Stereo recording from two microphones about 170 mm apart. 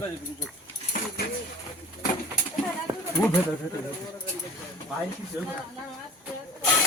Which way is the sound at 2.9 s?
25° right (ahead or behind).